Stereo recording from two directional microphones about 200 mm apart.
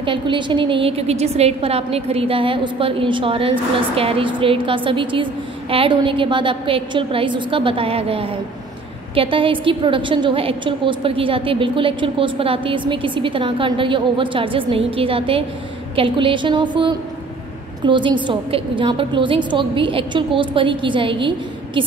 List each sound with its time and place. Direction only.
0.0 s a woman's voice: 25° right (ahead or behind)